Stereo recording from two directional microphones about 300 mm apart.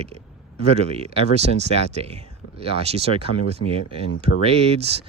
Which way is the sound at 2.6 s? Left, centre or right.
Centre.